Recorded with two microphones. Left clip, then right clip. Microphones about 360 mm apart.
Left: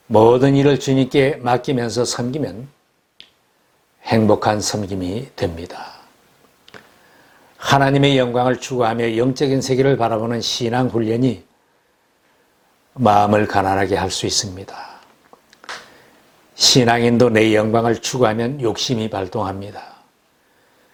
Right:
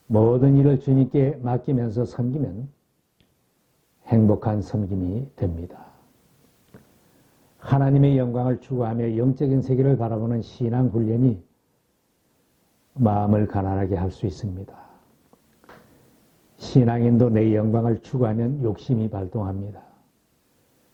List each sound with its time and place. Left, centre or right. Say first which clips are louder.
0.1 s speech: left 8 dB; left
0.3 s speech: left 6 dB; centre
4.4 s speech: left 10 dB; centre
7.6 s speech: left 9 dB; centre
12.9 s a man's voice: left 10 dB; centre